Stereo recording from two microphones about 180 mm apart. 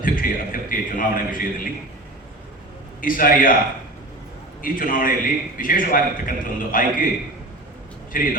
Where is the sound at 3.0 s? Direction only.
50° left (ahead or behind).